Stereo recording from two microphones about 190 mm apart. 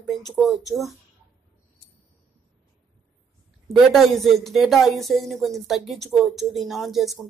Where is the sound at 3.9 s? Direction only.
Centre (ahead or behind).